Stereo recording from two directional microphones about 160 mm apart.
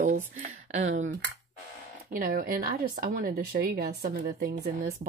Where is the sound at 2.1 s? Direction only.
60° right (ahead or behind).